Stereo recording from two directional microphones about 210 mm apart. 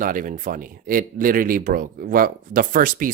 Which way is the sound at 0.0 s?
40° right (ahead or behind).